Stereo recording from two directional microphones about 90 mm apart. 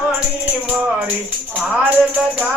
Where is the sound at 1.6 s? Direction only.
10° right (ahead or behind).